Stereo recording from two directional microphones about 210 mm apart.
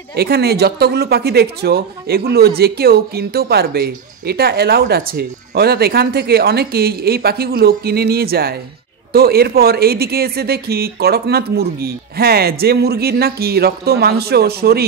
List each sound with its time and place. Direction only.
0.1 s speech: 50° right (ahead or behind)